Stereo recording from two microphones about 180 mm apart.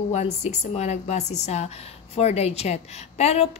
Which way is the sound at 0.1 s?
40° left (ahead or behind).